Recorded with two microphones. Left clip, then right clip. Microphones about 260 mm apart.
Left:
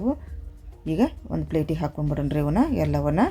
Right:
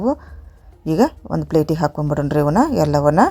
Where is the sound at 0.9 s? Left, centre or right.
Right.